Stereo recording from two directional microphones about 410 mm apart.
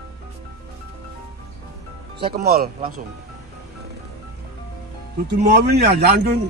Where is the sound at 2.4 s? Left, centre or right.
Right.